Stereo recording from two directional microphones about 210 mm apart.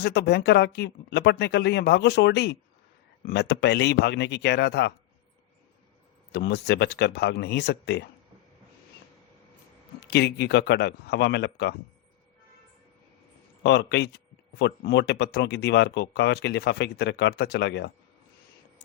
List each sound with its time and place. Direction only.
0.0 s speech: 50° left (ahead or behind)
6.3 s speech: 50° left (ahead or behind)
10.1 s speech: 50° left (ahead or behind)
13.6 s speech: 55° left (ahead or behind)